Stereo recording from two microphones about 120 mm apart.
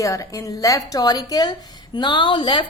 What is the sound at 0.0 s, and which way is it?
A woman's voice, 30° left (ahead or behind).